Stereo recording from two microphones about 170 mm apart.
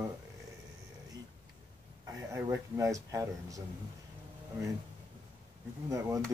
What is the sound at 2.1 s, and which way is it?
Speech, 15° right (ahead or behind).